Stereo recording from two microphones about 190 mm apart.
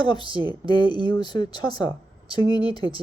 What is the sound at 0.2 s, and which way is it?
Speech, 25° right (ahead or behind).